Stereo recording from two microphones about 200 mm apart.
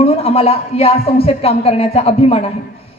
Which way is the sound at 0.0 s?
30° left (ahead or behind).